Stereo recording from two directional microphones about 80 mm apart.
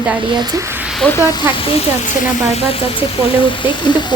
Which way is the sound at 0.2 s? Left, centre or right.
Right.